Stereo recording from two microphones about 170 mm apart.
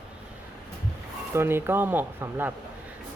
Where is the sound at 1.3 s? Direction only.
15° right (ahead or behind).